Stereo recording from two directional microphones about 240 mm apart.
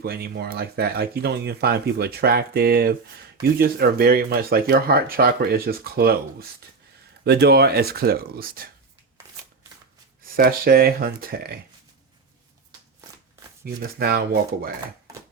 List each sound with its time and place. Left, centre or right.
0.0 s speech: right
10.3 s speech: right
14.0 s speech: right